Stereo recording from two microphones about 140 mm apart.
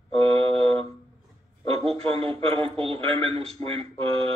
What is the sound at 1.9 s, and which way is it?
Speech, 40° right (ahead or behind).